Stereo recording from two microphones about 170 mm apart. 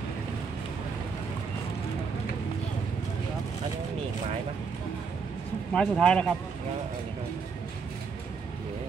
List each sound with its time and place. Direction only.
5.7 s speech: 5° left (ahead or behind)